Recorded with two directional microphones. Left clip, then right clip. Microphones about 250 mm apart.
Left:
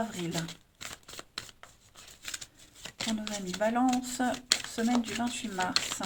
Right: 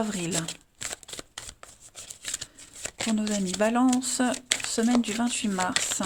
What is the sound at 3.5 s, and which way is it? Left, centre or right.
A woman's voice, right.